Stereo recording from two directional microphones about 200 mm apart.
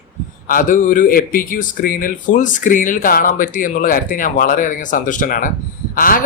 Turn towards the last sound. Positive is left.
turn(degrees=45)  # may be behind; listen again after turning